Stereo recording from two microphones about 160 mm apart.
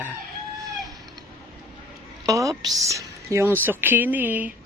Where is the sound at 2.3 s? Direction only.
20° right (ahead or behind).